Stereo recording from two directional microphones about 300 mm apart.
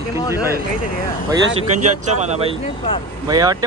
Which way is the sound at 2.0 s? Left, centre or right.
Centre.